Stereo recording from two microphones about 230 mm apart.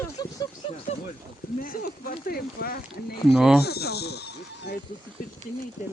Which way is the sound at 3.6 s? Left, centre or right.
Left.